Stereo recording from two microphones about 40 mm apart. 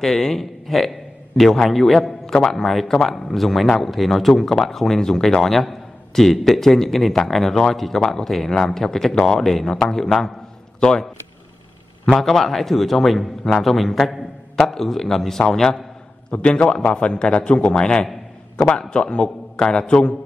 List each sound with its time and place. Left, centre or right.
0.0 s a man's voice: centre
10.8 s a man's voice: centre
12.2 s speech: centre
13.4 s speech: centre
13.7 s a man's voice: centre
16.3 s a man's voice: left